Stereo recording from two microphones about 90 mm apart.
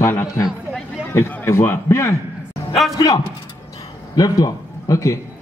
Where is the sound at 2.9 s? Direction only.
45° left (ahead or behind).